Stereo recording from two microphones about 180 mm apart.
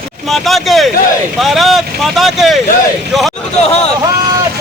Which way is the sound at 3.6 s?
35° left (ahead or behind).